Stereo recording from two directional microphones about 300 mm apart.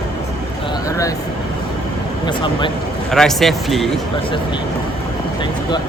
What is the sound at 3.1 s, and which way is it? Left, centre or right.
Speech, centre.